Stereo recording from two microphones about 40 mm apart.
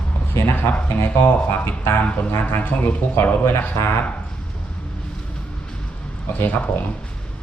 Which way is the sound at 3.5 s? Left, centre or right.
Left.